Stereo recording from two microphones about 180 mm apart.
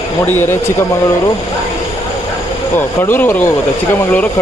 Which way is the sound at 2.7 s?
10° left (ahead or behind).